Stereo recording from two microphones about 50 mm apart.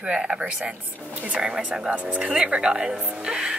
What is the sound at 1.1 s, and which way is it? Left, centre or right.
Speech, right.